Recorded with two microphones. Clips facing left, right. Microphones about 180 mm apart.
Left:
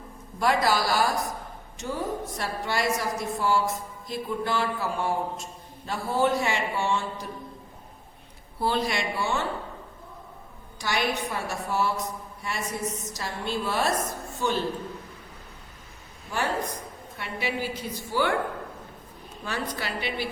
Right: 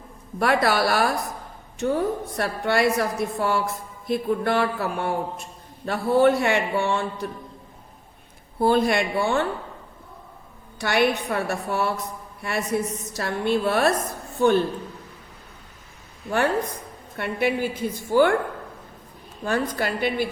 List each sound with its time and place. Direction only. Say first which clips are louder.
0.3 s a man's voice: right 3 dB; 60° right (ahead or behind)
8.5 s a man's voice: right 7 dB; 50° right (ahead or behind)
10.8 s a man's voice: right 6 dB; 60° right (ahead or behind)
17.2 s a woman's voice: right 7 dB; 55° right (ahead or behind)
19.5 s a woman's voice: right 7 dB; 50° right (ahead or behind)